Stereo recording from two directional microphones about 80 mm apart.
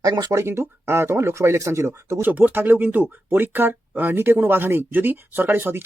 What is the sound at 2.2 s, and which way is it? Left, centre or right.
Speech, right.